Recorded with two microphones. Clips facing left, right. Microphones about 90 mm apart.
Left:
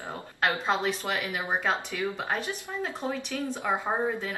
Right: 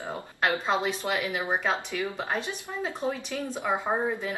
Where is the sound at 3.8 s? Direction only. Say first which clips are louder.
Right 1 dB; 5° right (ahead or behind).